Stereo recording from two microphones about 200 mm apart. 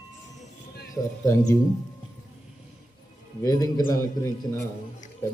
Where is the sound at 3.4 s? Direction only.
20° left (ahead or behind).